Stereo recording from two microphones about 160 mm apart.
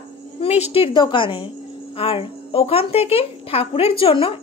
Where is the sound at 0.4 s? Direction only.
40° left (ahead or behind).